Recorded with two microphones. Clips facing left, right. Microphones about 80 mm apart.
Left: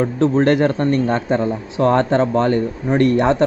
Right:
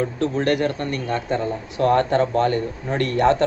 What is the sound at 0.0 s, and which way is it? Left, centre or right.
A man's voice, left.